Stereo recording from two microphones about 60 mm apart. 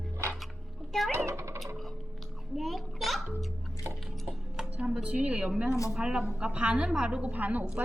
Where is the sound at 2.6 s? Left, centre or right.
Centre.